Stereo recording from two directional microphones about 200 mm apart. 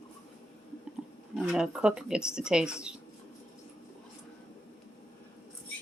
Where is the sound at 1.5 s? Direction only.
5° right (ahead or behind).